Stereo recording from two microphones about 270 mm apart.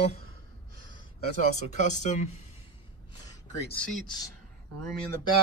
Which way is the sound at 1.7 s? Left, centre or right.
Left.